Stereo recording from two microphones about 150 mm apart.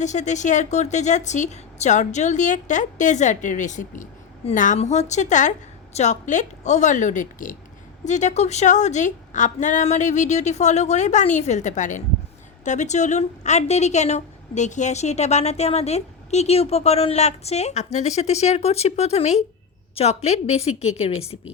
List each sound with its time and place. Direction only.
0.0 s a woman's voice: 50° left (ahead or behind)